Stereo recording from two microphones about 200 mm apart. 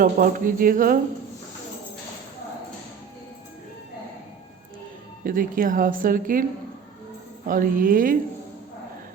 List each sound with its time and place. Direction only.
0.0 s speech: 45° right (ahead or behind)
5.2 s speech: 45° right (ahead or behind)
7.4 s speech: 45° right (ahead or behind)